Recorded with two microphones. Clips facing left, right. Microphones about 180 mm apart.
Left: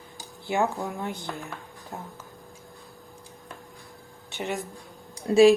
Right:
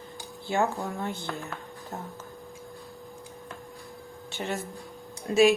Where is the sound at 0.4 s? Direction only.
15° left (ahead or behind).